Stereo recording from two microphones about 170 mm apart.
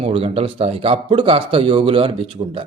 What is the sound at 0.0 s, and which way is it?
A man's voice, 35° right (ahead or behind).